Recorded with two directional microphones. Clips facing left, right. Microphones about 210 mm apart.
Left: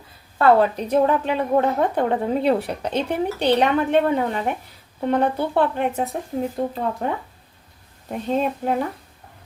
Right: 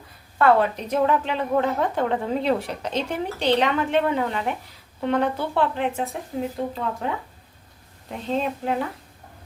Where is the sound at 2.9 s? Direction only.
60° left (ahead or behind).